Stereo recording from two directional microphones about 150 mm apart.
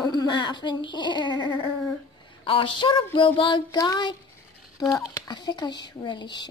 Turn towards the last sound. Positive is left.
turn(degrees=30)  # may be behind; listen again after turning